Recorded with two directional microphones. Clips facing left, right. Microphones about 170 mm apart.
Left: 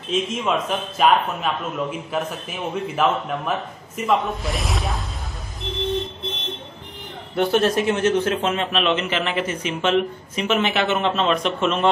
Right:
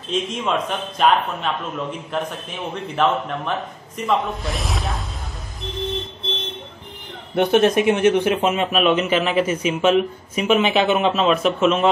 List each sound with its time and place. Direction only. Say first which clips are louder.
0.1 s a man's voice: even; centre (ahead or behind)
7.3 s a man's voice: right 3 dB; 20° right (ahead or behind); by 11.9 s 5° right (ahead or behind)